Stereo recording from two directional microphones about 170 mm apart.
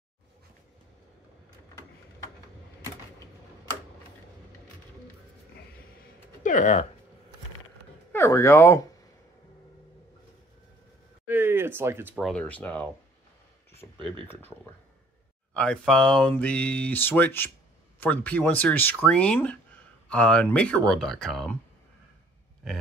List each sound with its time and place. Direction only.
6.4 s speech: 50° left (ahead or behind)
8.1 s speech: 15° left (ahead or behind)
11.2 s a sound: 10° right (ahead or behind)
12.2 s speech: 5° left (ahead or behind)